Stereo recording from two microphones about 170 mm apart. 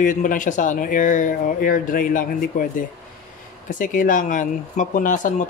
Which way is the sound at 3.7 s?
50° left (ahead or behind).